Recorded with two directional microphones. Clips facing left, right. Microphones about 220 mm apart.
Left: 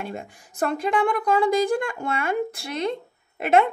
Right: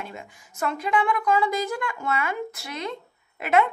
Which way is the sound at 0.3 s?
30° left (ahead or behind).